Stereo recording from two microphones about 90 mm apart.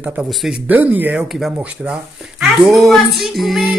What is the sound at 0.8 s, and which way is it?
Speech, 20° right (ahead or behind).